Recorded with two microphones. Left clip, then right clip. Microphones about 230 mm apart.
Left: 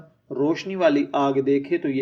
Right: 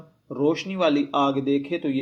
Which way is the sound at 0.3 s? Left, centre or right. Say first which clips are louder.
Even; right.